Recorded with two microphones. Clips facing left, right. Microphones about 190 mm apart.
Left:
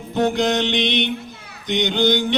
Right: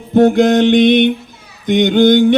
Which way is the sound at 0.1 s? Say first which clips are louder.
Right 10 dB; 50° right (ahead or behind).